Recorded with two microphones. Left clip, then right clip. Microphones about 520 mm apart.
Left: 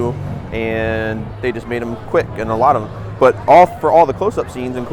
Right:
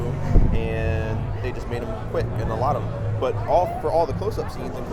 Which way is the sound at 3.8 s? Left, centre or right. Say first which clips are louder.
Left 10 dB; left.